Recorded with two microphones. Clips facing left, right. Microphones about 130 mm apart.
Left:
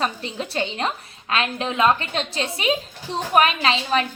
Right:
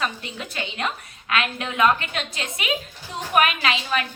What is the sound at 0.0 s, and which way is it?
A woman's voice, 30° left (ahead or behind).